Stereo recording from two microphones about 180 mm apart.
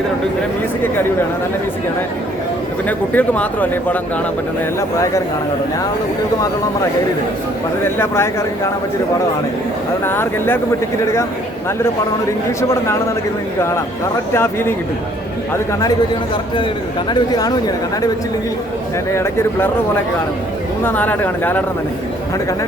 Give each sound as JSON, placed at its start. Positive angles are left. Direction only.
{"t": 2.8, "sound": "speech", "side_deg": 10}
{"t": 7.9, "sound": "speech", "side_deg": 15}
{"t": 10.1, "sound": "speech", "side_deg": 10}
{"t": 12.5, "sound": "speech", "side_deg": 15}
{"t": 17.1, "sound": "speech", "side_deg": 25}
{"t": 19.1, "sound": "speech", "side_deg": 15}
{"t": 20.8, "sound": "speech", "side_deg": 10}